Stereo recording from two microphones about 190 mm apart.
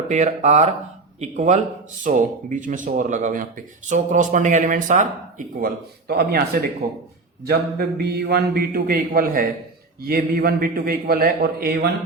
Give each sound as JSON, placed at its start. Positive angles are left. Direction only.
{"t": 0.1, "sound": "a man's voice", "side_deg": -40}